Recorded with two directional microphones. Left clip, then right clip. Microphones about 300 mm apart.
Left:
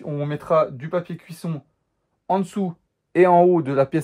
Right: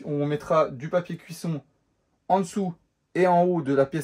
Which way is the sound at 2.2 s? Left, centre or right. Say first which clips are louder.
Left 1 dB; centre.